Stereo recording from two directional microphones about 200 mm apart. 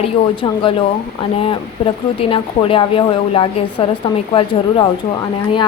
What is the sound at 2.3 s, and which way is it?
A woman's voice, 25° left (ahead or behind).